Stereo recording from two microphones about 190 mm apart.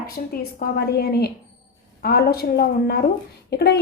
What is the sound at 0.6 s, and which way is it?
A woman's voice, 55° left (ahead or behind).